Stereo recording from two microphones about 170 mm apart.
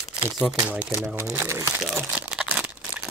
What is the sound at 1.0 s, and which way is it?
Speech, 15° right (ahead or behind).